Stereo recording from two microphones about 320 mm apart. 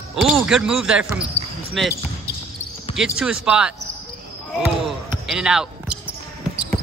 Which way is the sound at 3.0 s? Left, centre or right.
Centre.